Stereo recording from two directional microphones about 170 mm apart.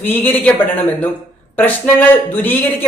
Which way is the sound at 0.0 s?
10° left (ahead or behind).